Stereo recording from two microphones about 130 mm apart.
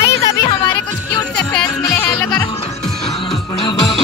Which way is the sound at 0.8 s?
30° left (ahead or behind).